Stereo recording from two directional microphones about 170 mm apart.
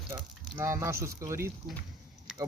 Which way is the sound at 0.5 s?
15° right (ahead or behind).